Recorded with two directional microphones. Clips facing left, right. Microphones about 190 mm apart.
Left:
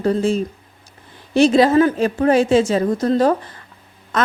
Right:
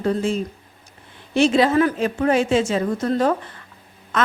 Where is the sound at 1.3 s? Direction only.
40° left (ahead or behind).